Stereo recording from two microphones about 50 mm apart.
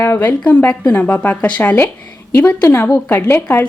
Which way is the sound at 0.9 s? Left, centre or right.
Left.